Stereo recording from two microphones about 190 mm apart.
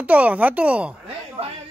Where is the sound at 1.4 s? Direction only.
35° right (ahead or behind).